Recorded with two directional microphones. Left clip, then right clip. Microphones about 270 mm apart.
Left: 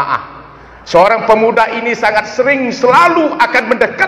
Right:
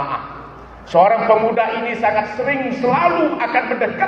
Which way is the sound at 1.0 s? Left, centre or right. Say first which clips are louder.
Left 3 dB; left.